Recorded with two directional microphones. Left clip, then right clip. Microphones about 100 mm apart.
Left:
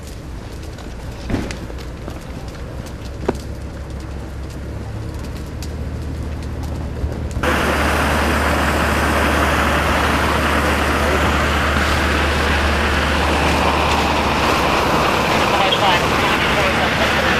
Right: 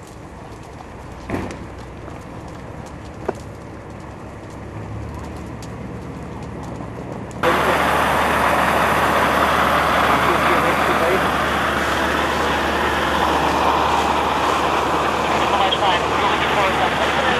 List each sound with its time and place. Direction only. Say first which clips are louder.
1.3 s a sound: left 1 dB; 60° right (ahead or behind)
7.3 s vehicle: right 1 dB; 45° right (ahead or behind); by 16.3 s 15° right (ahead or behind)
16.3 s vehicle: left 1 dB; 25° right (ahead or behind)